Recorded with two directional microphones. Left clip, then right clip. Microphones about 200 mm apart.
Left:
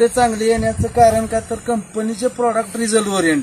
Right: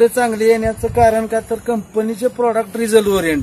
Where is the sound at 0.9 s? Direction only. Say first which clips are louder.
Left 1 dB; 30° right (ahead or behind).